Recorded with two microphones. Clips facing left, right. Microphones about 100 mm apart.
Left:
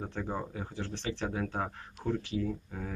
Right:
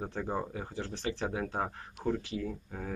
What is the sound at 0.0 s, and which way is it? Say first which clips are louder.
Speech: right 1 dB; 15° right (ahead or behind).